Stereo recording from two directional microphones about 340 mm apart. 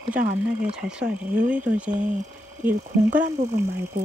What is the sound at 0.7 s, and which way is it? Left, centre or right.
Speech, centre.